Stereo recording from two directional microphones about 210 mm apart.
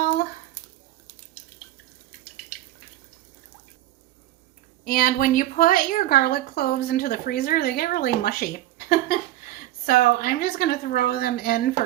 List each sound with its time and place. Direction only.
4.9 s a woman's voice: 40° left (ahead or behind)